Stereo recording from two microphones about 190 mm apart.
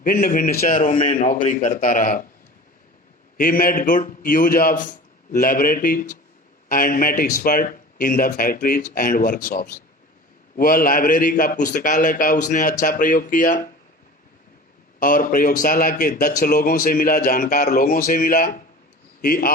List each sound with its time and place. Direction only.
0.0 s a man's voice: 45° left (ahead or behind)
3.3 s a man's voice: 50° left (ahead or behind)
14.9 s a man's voice: 45° left (ahead or behind)